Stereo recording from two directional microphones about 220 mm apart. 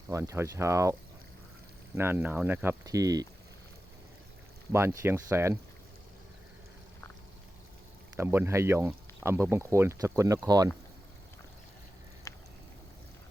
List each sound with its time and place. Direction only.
0.1 s speech: 15° right (ahead or behind)
2.0 s speech: 10° right (ahead or behind)
4.7 s speech: 10° right (ahead or behind)
8.1 s speech: 10° right (ahead or behind)
12.3 s a sound: 15° left (ahead or behind)